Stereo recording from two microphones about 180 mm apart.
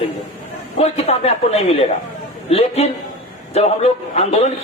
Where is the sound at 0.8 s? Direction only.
35° left (ahead or behind).